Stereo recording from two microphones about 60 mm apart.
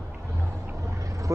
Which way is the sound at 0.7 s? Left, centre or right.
Right.